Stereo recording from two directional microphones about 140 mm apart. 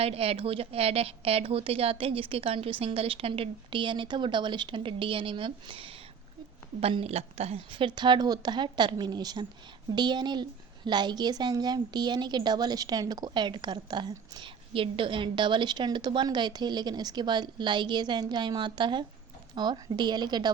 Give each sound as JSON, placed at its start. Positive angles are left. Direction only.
{"t": 0.0, "sound": "a woman's voice", "side_deg": -45}